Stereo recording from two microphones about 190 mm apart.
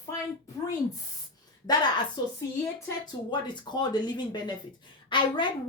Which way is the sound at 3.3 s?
25° left (ahead or behind).